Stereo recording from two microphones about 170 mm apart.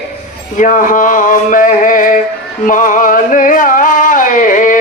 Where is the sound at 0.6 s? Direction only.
50° left (ahead or behind).